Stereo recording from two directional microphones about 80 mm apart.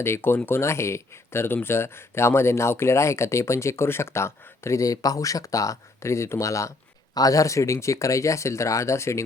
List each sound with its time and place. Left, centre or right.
0.0 s speech: left